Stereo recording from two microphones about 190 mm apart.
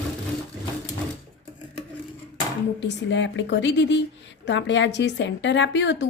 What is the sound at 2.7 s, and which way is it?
A woman's voice, 70° left (ahead or behind).